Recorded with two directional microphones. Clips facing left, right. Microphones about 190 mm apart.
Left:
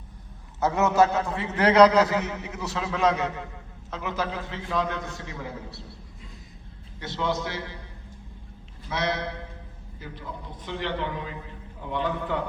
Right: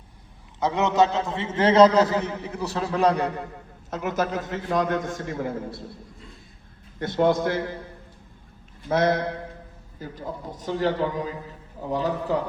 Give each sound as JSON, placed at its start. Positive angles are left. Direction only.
{"t": 0.6, "sound": "a man's voice", "side_deg": -15}
{"t": 7.0, "sound": "a man's voice", "side_deg": -50}
{"t": 8.9, "sound": "a man's voice", "side_deg": -50}